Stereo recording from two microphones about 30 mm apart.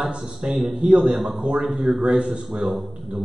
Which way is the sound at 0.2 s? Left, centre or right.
Right.